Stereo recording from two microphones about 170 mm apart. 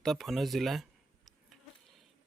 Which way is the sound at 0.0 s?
Centre (ahead or behind).